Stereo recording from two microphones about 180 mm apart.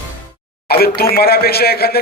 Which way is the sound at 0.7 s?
60° left (ahead or behind).